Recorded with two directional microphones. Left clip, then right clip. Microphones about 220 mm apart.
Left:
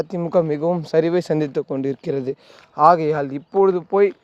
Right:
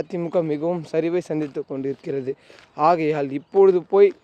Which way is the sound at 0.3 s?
25° left (ahead or behind).